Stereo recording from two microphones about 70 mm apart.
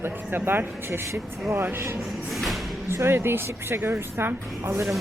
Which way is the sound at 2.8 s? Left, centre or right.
Right.